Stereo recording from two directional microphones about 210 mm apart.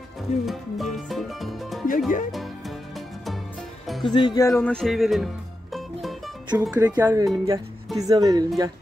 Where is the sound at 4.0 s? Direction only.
20° left (ahead or behind); by 5.3 s centre (ahead or behind).